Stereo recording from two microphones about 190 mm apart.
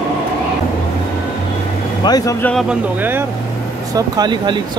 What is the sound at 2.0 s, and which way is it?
Speech, 20° left (ahead or behind).